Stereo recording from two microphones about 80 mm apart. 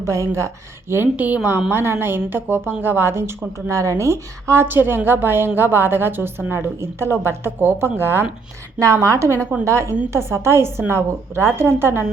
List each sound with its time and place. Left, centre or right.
0.0 s a woman's voice: right
1.1 s a woman's voice: centre
8.8 s a woman's voice: right